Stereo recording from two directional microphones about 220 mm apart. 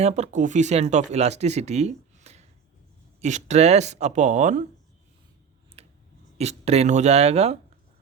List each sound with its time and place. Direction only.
0.0 s speech: 30° right (ahead or behind)
5.8 s a sound: 25° right (ahead or behind)
6.3 s speech: 30° right (ahead or behind)